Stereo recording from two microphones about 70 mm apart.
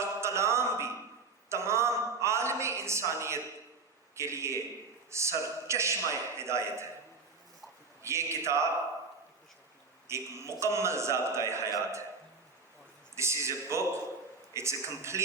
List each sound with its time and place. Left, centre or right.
0.0 s music: right
1.5 s a sound: right
5.1 s a man's voice: right
8.0 s a man's voice: right
10.1 s a man's voice: right
13.1 s a man's voice: right